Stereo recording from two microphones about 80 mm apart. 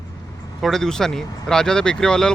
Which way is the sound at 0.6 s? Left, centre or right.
Centre.